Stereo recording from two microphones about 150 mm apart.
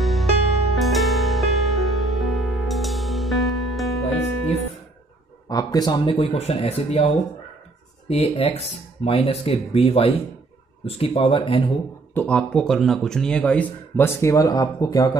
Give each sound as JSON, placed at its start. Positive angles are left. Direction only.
{"t": 0.0, "sound": "music", "side_deg": 0}
{"t": 5.5, "sound": "speech", "side_deg": 25}
{"t": 8.1, "sound": "speech", "side_deg": 40}
{"t": 12.1, "sound": "speech", "side_deg": 10}